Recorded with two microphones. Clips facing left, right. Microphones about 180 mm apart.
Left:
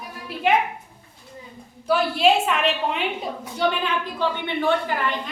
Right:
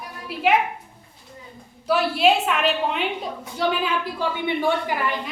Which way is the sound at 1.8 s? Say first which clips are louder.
Even; centre (ahead or behind).